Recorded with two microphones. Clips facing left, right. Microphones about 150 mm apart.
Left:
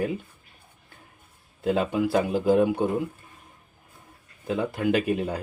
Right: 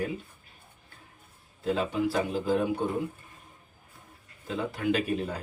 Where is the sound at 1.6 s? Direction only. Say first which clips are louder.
Left 4 dB; 55° left (ahead or behind).